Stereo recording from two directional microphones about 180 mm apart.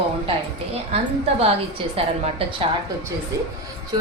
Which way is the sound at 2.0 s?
30° right (ahead or behind).